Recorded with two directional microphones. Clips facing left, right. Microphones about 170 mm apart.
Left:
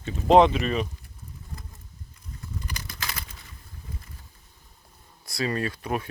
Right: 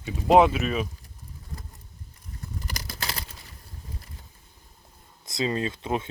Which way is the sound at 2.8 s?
35° right (ahead or behind).